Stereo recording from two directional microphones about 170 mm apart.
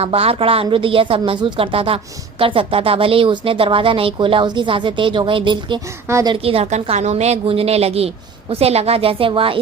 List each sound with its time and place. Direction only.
0.0 s speech: 35° right (ahead or behind)
6.1 s a woman's voice: 15° right (ahead or behind)
6.3 s speech: 35° right (ahead or behind)